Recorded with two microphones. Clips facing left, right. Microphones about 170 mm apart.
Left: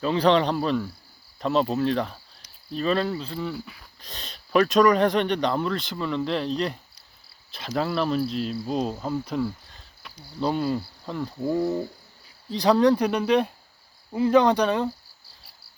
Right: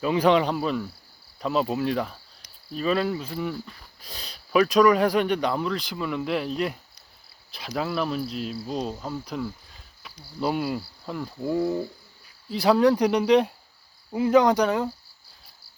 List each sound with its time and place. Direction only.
0.0 s speech: 10° right (ahead or behind)
3.5 s speech: 5° left (ahead or behind); by 14.8 s 10° right (ahead or behind)